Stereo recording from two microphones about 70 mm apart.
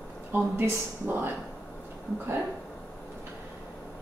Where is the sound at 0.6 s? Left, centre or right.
Right.